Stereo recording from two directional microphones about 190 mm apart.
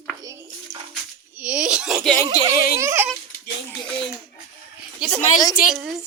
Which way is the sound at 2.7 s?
15° right (ahead or behind).